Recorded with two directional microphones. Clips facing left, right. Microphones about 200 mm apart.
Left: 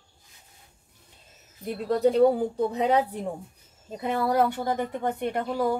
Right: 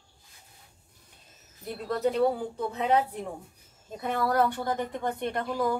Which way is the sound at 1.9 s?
35° left (ahead or behind).